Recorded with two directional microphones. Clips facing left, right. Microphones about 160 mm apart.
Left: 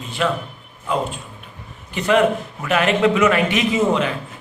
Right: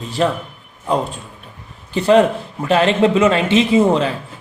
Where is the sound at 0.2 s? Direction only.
35° right (ahead or behind).